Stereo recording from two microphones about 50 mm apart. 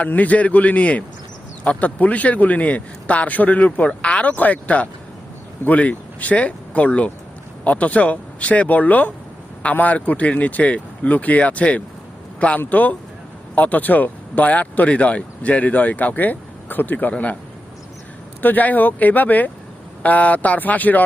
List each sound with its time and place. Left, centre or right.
0.0 s a man's voice: left
18.4 s speech: left